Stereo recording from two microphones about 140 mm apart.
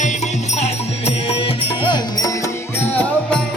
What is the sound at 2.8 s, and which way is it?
Music, 10° left (ahead or behind).